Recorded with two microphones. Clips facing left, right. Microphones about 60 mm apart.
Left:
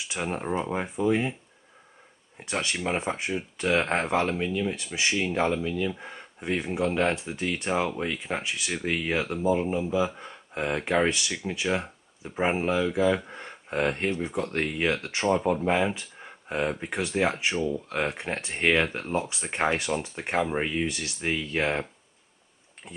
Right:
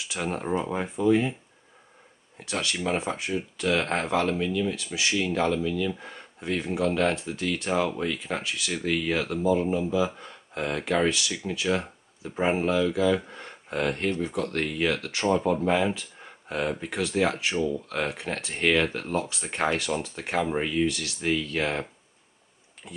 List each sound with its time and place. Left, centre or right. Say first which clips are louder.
0.0 s speech: even; centre
2.8 s speech: even; centre
22.8 s speech: right 2 dB; centre